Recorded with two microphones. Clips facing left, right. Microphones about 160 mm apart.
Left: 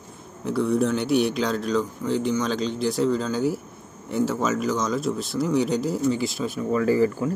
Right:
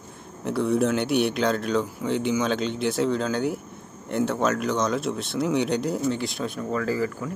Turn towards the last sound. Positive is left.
turn(degrees=25)  # may be behind; listen again after turning